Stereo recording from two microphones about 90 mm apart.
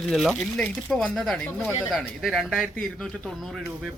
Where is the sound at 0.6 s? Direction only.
15° left (ahead or behind).